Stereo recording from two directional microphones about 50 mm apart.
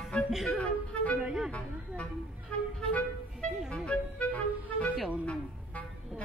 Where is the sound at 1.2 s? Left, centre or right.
Centre.